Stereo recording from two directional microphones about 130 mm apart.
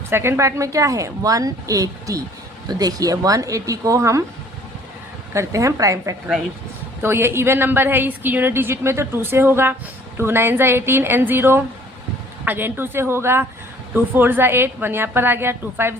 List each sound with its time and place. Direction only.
0.1 s a woman's voice: 20° right (ahead or behind)
5.3 s a woman's voice: 25° right (ahead or behind)